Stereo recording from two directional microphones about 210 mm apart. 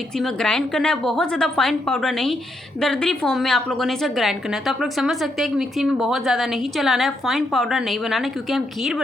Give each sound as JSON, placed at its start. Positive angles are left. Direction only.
{"t": 0.2, "sound": "a woman's voice", "side_deg": 0}